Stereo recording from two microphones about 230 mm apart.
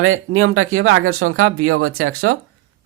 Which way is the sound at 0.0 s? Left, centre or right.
Right.